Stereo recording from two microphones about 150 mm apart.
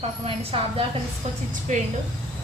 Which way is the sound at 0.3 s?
35° right (ahead or behind).